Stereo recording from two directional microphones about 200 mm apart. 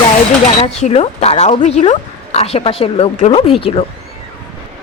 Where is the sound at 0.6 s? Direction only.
35° left (ahead or behind).